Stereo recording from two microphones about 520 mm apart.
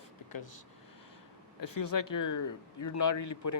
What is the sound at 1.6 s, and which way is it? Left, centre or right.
A man's voice, left.